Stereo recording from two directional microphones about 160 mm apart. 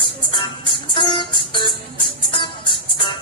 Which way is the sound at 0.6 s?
30° left (ahead or behind).